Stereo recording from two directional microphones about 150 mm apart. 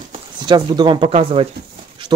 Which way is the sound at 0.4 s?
30° right (ahead or behind).